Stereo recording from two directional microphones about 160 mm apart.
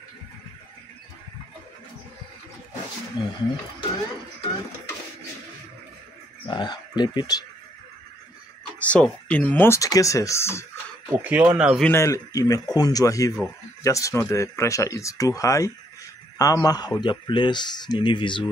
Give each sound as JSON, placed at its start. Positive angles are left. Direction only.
{"t": 3.2, "sound": "speech", "side_deg": 25}
{"t": 6.4, "sound": "speech", "side_deg": 25}
{"t": 8.7, "sound": "speech", "side_deg": 10}
{"t": 11.1, "sound": "speech", "side_deg": -10}
{"t": 11.9, "sound": "speech", "side_deg": 20}